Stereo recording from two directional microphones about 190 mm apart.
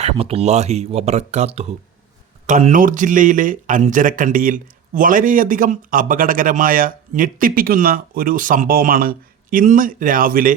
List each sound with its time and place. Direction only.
0.0 s speech: 30° right (ahead or behind); by 10.5 s 50° right (ahead or behind)